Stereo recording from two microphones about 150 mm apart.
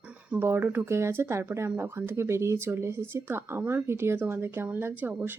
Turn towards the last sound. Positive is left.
turn(degrees=-15)  # may be behind; listen again after turning